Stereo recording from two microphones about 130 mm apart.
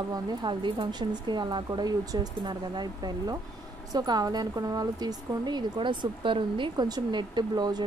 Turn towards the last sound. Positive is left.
turn(degrees=-30)  # may be behind; listen again after turning